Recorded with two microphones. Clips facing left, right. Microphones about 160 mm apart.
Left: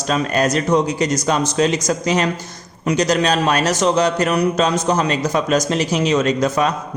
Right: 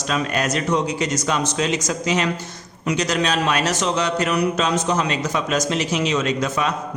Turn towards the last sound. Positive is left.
turn(degrees=40)  # may be behind; listen again after turning